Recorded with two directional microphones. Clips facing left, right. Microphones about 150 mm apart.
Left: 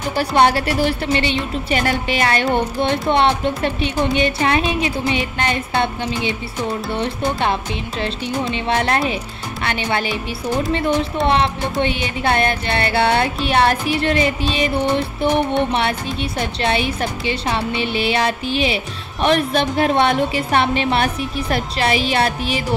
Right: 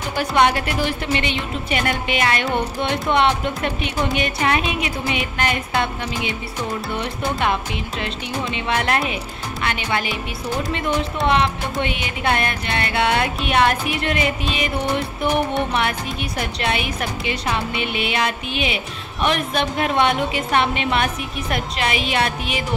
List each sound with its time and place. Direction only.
0.1 s a woman's voice: 35° left (ahead or behind)
6.9 s a woman's voice: 30° left (ahead or behind)
11.2 s a woman's voice: 30° left (ahead or behind)